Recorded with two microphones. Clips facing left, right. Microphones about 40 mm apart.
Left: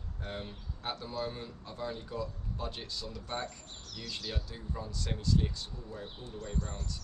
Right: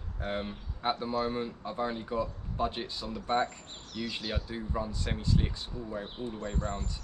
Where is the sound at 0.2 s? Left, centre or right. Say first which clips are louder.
Right 7 dB; right.